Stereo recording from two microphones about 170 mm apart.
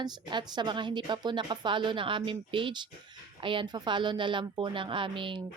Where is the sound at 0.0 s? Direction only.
25° right (ahead or behind).